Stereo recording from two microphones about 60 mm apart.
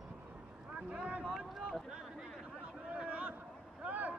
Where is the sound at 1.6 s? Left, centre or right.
Centre.